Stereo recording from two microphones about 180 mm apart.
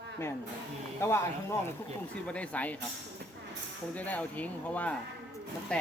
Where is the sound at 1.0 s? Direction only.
15° left (ahead or behind).